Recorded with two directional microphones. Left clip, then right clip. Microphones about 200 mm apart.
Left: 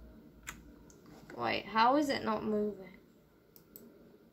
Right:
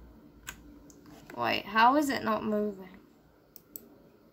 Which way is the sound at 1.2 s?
20° right (ahead or behind).